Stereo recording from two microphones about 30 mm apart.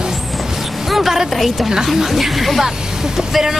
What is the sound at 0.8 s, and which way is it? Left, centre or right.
Speech, centre.